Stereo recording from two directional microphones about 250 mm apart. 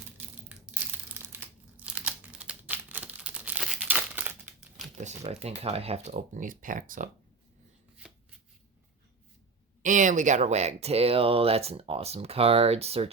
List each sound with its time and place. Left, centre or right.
0.4 s crumpling: centre
4.9 s speech: right
9.8 s speech: right